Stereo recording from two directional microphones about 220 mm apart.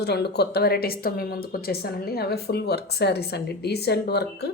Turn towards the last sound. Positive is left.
turn(degrees=50)  # may be behind; listen again after turning